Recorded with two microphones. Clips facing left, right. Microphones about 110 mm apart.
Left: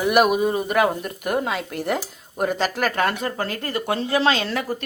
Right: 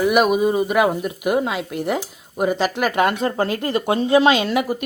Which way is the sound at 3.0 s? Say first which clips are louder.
Right 5 dB; 20° right (ahead or behind).